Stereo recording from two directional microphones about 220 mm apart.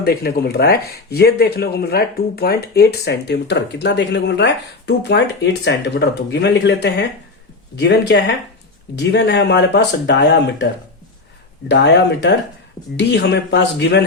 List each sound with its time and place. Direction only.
0.0 s speech: 45° left (ahead or behind)
11.7 s speech: 50° left (ahead or behind)